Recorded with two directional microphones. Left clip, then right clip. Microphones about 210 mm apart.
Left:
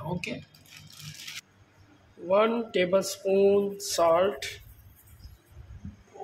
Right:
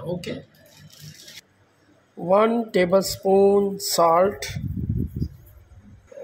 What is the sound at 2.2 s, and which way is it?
Speech, 20° right (ahead or behind).